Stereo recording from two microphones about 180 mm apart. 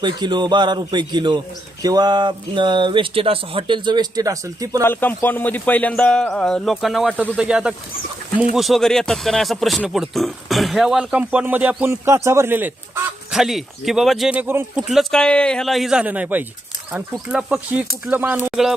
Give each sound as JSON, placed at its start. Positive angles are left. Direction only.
{"t": 0.0, "sound": "speech", "side_deg": -25}
{"t": 4.8, "sound": "speech", "side_deg": 10}
{"t": 14.8, "sound": "speech", "side_deg": 0}